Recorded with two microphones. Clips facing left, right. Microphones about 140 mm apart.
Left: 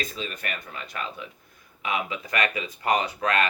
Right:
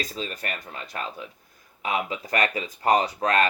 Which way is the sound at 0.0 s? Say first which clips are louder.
Right 1 dB; 35° right (ahead or behind).